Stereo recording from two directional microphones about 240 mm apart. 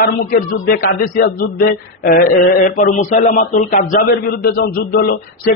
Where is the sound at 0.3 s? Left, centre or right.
Left.